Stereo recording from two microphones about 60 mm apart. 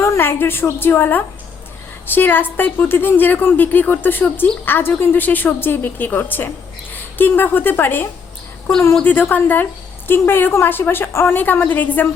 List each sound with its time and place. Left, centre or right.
0.2 s a woman's voice: left
9.0 s a woman's voice: left
11.3 s a woman's voice: left